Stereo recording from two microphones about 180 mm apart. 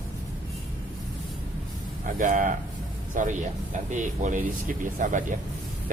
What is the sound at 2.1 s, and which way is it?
Speech, 45° right (ahead or behind).